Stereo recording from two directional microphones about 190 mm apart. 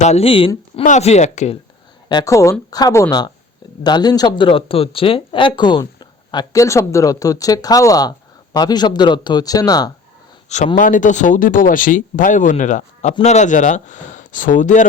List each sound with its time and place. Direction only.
0.0 s speech: 35° left (ahead or behind)
2.0 s speech: 20° left (ahead or behind)
10.8 s speech: 45° left (ahead or behind)